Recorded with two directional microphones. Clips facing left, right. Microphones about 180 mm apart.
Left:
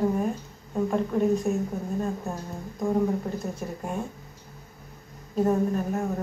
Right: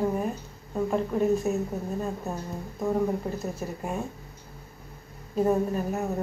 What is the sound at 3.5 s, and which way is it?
Speech, 5° right (ahead or behind).